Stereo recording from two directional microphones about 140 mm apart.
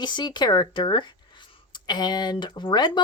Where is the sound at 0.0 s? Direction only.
30° left (ahead or behind).